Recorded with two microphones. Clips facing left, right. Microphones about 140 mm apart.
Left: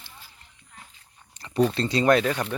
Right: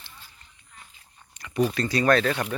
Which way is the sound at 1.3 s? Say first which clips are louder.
Even; 30° left (ahead or behind).